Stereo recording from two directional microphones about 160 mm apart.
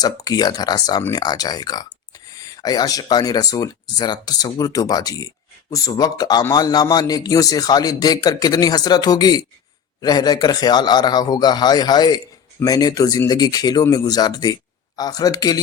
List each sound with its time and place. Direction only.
0.0 s a man's voice: 25° left (ahead or behind)